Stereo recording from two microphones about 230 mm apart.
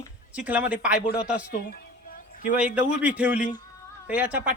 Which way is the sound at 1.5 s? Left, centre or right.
Left.